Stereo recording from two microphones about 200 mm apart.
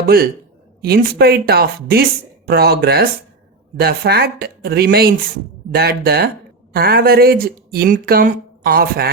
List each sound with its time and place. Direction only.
0.0 s speech: 50° right (ahead or behind)